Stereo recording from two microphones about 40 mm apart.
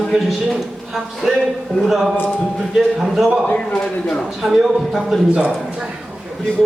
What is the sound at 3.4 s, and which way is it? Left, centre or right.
Speech, left.